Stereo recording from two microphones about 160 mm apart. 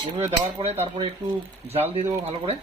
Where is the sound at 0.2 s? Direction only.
40° right (ahead or behind).